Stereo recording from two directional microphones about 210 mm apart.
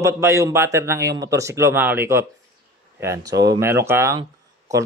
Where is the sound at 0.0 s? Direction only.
10° right (ahead or behind).